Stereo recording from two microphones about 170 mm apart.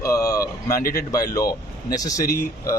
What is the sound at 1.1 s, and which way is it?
Speech, 20° left (ahead or behind).